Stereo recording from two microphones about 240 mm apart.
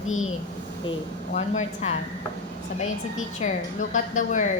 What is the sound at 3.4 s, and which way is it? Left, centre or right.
A woman's voice, left.